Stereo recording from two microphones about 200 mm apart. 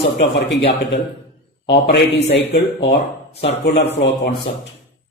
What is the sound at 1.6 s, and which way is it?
Speech, 60° left (ahead or behind).